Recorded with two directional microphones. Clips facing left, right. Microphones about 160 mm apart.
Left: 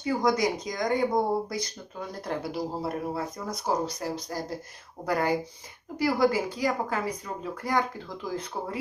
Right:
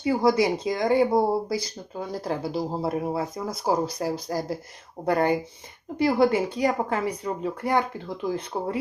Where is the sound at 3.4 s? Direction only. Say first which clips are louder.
Right 3 dB; 20° right (ahead or behind).